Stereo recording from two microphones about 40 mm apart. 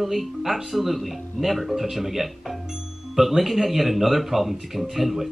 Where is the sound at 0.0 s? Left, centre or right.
Centre.